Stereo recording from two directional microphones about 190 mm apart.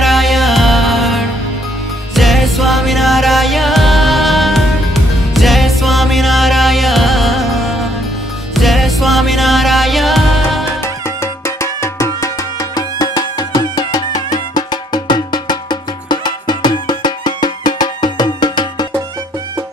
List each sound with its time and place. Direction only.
0.0 s music: centre (ahead or behind)
10.8 s music: 15° left (ahead or behind)